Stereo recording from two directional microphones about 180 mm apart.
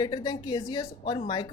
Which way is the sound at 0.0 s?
25° left (ahead or behind).